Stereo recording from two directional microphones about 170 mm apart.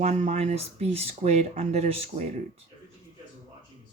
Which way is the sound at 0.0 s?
40° right (ahead or behind).